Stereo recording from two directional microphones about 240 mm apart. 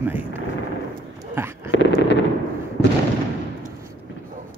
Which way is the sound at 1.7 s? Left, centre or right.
Left.